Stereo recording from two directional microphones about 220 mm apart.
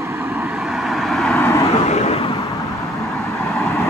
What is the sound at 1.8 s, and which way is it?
Vehicle, 30° left (ahead or behind).